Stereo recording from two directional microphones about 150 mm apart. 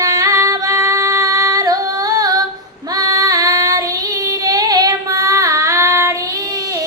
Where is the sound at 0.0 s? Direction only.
20° right (ahead or behind).